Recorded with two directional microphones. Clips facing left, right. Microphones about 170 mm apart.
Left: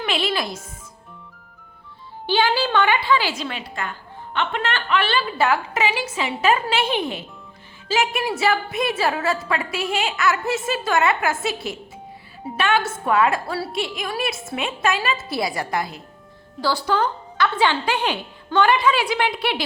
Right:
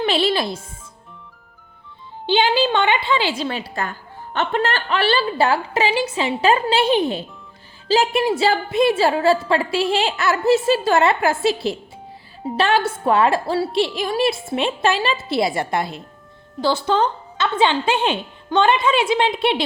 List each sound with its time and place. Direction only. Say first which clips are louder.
0.0 s a woman's voice: right 5 dB; 30° right (ahead or behind)
2.2 s a woman's voice: right 3 dB; 20° right (ahead or behind)